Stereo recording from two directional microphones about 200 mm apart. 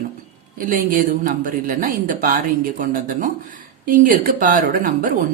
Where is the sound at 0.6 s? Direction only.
45° right (ahead or behind).